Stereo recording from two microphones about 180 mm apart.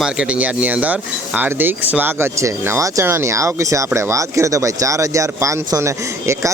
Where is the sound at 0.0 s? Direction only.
5° right (ahead or behind).